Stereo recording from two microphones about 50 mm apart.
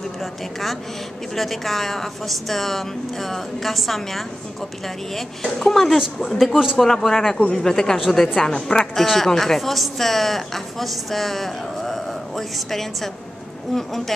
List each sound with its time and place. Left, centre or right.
0.2 s a woman's voice: centre
8.0 s a woman's voice: centre
8.5 s speech: centre
8.9 s a woman's voice: centre